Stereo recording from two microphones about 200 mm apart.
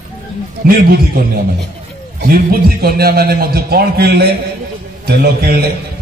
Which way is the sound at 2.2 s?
45° right (ahead or behind).